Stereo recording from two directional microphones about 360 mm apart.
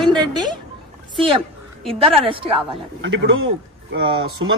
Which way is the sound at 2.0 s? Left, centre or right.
Centre.